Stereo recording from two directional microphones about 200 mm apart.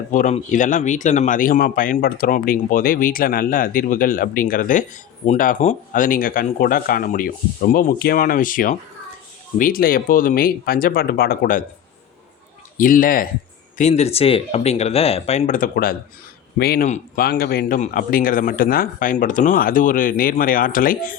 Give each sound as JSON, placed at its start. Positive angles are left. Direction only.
{"t": 0.1, "sound": "speech", "side_deg": 40}
{"t": 12.7, "sound": "speech", "side_deg": 45}